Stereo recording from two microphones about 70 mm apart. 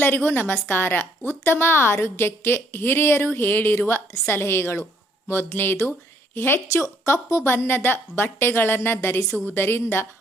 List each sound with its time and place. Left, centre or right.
0.0 s a woman's voice: left
6.8 s a woman's voice: left